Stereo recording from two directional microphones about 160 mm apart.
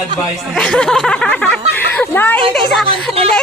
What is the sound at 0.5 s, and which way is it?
Speech, 5° left (ahead or behind).